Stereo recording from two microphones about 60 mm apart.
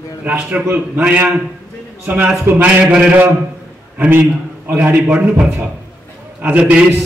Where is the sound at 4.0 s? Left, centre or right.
Right.